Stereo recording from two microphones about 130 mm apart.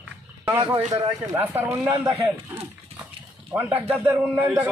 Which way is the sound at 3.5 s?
15° right (ahead or behind).